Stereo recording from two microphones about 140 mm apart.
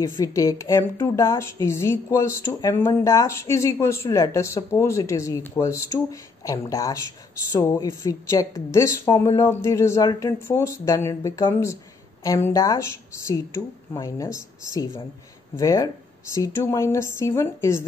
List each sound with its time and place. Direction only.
0.0 s a woman's voice: 20° left (ahead or behind)
14.0 s a woman's voice: 20° left (ahead or behind)